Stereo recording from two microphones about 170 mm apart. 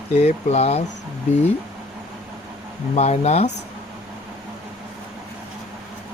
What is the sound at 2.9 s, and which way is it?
Speech, 40° left (ahead or behind).